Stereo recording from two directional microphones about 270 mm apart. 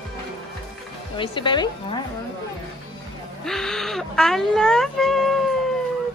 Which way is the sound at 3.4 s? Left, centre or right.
Centre.